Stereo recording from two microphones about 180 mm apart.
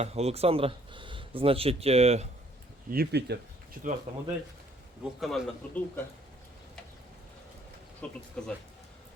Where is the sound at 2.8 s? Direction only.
60° right (ahead or behind).